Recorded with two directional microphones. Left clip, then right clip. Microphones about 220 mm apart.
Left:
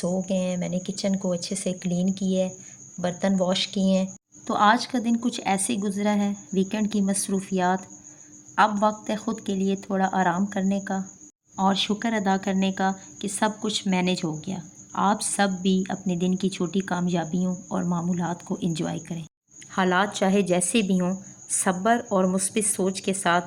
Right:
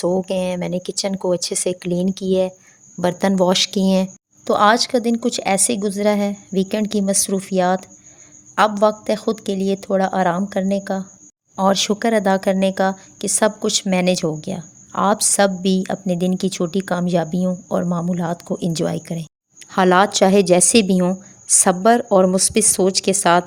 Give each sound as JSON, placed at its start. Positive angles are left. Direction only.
{"t": 0.0, "sound": "speech", "side_deg": -50}